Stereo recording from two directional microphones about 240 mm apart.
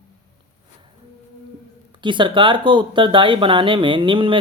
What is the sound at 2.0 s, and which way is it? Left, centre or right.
Speech, centre.